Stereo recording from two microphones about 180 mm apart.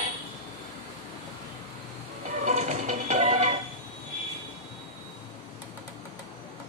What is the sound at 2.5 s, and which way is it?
Music, 40° right (ahead or behind).